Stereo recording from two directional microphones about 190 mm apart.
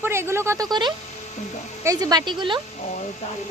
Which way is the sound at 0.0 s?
15° right (ahead or behind).